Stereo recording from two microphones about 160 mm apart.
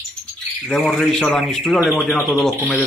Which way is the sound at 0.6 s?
Centre (ahead or behind).